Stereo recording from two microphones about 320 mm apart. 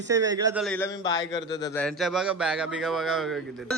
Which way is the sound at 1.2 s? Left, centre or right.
Left.